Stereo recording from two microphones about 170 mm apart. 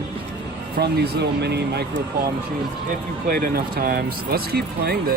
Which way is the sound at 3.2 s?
60° right (ahead or behind).